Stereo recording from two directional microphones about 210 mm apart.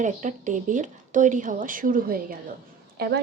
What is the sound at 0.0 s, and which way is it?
Speech, 35° right (ahead or behind).